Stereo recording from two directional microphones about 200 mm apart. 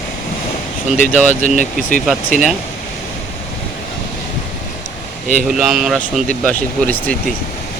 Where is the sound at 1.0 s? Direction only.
35° left (ahead or behind).